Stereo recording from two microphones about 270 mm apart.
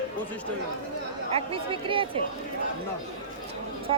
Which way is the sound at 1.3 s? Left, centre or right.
Centre.